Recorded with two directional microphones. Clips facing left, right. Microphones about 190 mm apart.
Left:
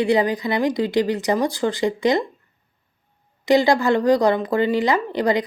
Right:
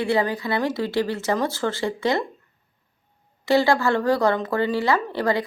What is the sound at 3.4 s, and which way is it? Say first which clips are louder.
Speech: left 3 dB; 15° left (ahead or behind).